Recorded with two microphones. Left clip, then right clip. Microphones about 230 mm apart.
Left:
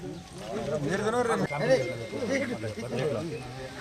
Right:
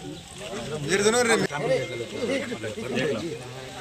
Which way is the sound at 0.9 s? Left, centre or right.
Left.